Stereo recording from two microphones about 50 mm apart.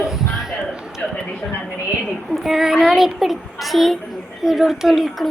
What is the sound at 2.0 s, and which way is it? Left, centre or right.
A child's voice, centre.